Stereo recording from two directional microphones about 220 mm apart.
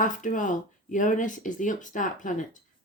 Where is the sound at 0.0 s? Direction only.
35° left (ahead or behind).